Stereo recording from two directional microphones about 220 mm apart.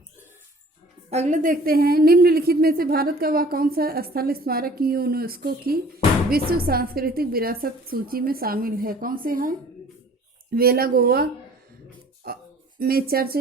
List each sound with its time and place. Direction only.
1.1 s speech: 30° right (ahead or behind)